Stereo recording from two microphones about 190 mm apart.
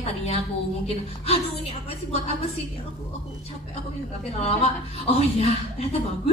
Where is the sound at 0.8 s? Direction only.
30° left (ahead or behind).